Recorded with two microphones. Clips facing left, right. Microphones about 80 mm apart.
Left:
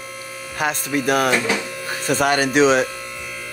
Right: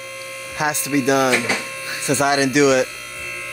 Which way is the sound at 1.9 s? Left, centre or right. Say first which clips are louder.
Right 1 dB; left.